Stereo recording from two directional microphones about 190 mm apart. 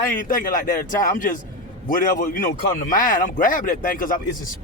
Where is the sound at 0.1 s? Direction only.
45° left (ahead or behind).